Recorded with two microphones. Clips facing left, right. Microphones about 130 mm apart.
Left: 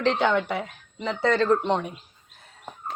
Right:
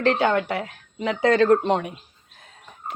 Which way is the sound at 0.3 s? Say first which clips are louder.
Right 1 dB; 65° right (ahead or behind).